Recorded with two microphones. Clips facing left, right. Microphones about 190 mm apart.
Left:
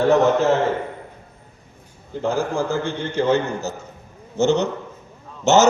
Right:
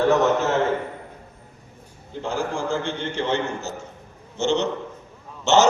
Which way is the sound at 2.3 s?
40° left (ahead or behind).